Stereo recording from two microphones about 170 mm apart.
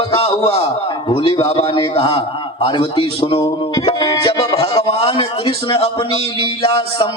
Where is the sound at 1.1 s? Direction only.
30° left (ahead or behind).